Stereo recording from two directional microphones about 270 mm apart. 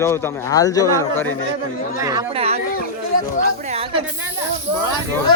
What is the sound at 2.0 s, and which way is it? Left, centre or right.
Speech, centre.